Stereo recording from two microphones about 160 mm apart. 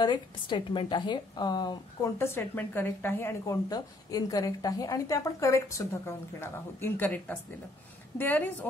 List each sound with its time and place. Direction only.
0.0 s a woman's voice: 30° left (ahead or behind); by 8.6 s 10° left (ahead or behind)